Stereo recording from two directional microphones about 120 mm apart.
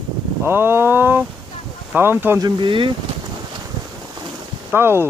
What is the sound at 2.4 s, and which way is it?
Speech, 45° right (ahead or behind).